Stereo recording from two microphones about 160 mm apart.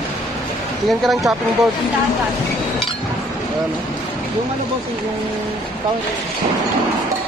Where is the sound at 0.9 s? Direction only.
Centre (ahead or behind).